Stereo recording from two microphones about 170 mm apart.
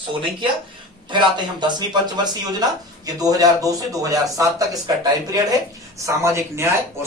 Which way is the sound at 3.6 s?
20° right (ahead or behind).